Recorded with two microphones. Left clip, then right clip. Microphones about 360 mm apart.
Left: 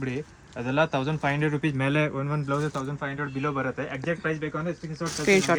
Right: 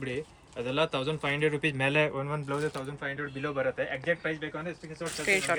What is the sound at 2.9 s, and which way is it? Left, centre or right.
Speech, centre.